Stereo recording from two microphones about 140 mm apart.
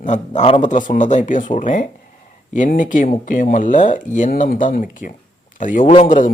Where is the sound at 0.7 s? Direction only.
65° left (ahead or behind).